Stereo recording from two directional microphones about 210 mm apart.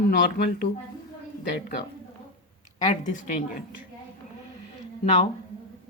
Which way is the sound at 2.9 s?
40° left (ahead or behind).